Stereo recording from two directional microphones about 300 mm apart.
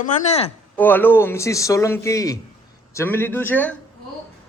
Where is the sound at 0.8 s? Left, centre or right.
Centre.